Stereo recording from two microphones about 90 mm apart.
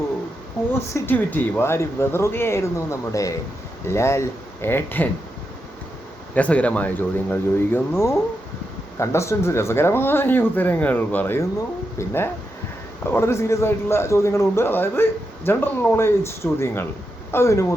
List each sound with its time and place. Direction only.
1.0 s a man's voice: 20° left (ahead or behind)
6.3 s a man's voice: 15° left (ahead or behind); by 17.7 s 30° left (ahead or behind)